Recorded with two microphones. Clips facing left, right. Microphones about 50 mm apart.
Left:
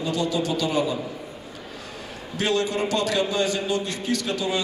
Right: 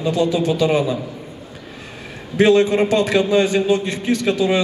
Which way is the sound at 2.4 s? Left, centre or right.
Right.